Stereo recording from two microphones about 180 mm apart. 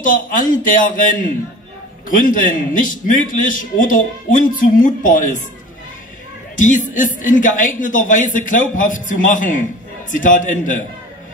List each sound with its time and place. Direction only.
0.0 s a man's voice: 50° left (ahead or behind)
6.5 s a man's voice: 45° left (ahead or behind)